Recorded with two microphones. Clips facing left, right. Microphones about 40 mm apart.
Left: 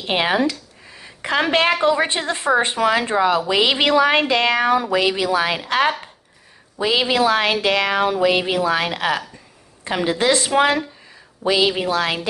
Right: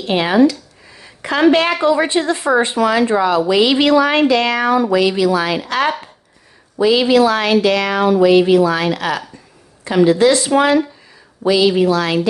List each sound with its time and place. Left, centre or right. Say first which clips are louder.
0.0 s a woman's voice: right 6 dB; centre